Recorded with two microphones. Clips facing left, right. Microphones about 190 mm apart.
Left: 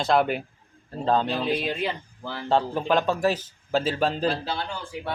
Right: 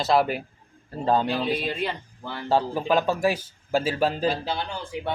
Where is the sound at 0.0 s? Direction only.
Centre (ahead or behind).